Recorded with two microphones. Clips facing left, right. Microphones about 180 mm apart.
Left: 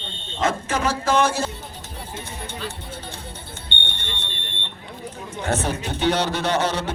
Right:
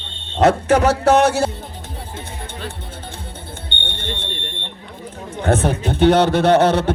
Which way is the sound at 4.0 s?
55° right (ahead or behind).